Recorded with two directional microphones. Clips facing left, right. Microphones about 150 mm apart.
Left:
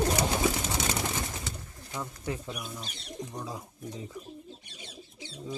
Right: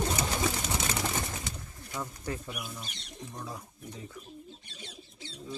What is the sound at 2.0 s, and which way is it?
Speech, 5° left (ahead or behind).